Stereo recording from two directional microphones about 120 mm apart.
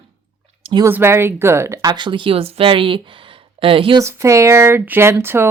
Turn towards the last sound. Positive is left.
turn(degrees=-20)  # may be behind; listen again after turning